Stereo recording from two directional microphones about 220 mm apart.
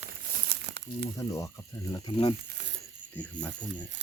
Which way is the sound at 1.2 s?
15° left (ahead or behind).